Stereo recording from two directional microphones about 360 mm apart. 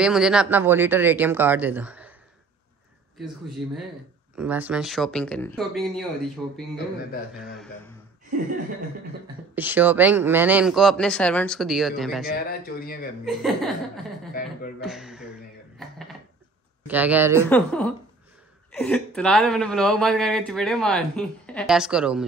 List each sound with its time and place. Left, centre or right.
0.0 s a woman's voice: centre
3.6 s a woman's voice: centre
9.6 s a woman's voice: centre
12.3 s speech: left
13.2 s a woman's voice: centre
14.8 s speech: centre
16.8 s a woman's voice: centre
17.5 s a woman's voice: centre